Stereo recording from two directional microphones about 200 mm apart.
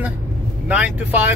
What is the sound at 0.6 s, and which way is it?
Speech, 5° right (ahead or behind).